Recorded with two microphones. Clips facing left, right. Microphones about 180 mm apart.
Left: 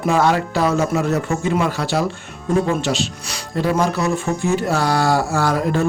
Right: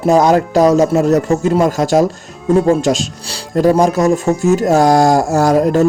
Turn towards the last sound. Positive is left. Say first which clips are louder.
# right 7 dB
turn(degrees=-40)  # may be behind; listen again after turning